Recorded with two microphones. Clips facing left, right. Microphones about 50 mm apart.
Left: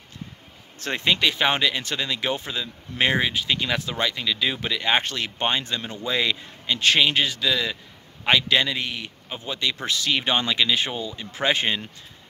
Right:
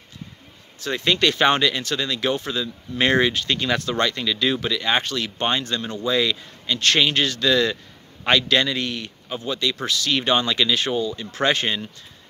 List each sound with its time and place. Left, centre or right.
0.7 s speech: left
1.0 s speech: centre
4.6 s speech: left
5.4 s speech: centre